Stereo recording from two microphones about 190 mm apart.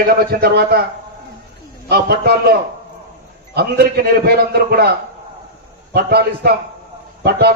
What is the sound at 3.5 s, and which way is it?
A man's voice, 55° right (ahead or behind).